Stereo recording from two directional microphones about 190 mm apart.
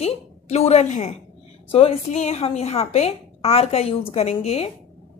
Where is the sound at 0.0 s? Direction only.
35° left (ahead or behind).